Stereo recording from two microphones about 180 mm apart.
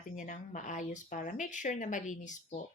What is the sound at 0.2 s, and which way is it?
Speech, 45° left (ahead or behind).